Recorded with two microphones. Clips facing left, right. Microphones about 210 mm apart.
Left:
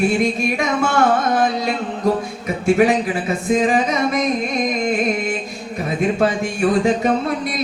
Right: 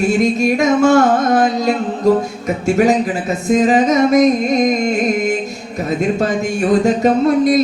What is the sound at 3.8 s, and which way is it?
Speech, 45° right (ahead or behind).